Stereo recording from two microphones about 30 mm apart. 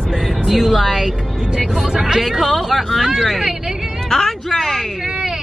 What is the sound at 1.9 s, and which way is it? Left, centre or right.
Speech, centre.